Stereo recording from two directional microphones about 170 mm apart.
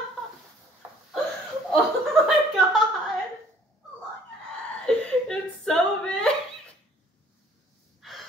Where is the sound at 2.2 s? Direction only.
Centre (ahead or behind).